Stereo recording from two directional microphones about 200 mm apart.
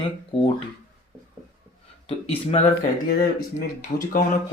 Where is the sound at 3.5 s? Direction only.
40° left (ahead or behind).